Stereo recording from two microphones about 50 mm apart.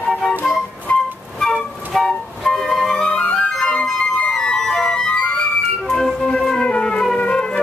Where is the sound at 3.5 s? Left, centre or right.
Centre.